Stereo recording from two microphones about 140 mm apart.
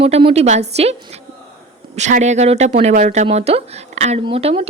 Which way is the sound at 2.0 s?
55° right (ahead or behind).